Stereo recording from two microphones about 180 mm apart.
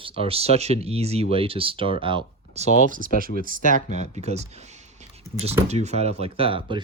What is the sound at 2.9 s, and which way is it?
Speech, 50° right (ahead or behind).